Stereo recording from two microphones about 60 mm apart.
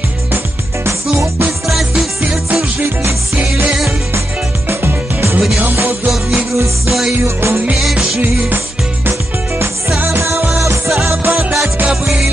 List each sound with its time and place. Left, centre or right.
1.7 s music: centre
3.0 s music: right
4.6 s music: right
6.0 s music: centre
7.2 s music: right
7.7 s music: centre
10.0 s music: right
11.3 s music: centre